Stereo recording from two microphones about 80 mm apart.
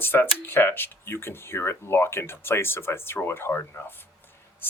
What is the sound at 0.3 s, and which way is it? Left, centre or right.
Speech, left.